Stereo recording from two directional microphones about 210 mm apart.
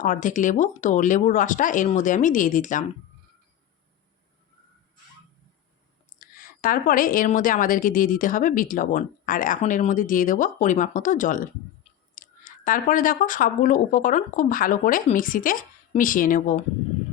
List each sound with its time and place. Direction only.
0.0 s a woman's voice: 35° left (ahead or behind)
6.1 s a woman's voice: 40° left (ahead or behind)